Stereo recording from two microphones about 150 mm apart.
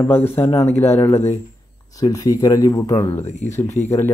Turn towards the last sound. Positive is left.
turn(degrees=50)  # may be behind; listen again after turning